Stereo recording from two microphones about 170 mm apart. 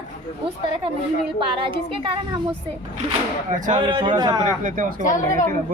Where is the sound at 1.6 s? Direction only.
30° right (ahead or behind).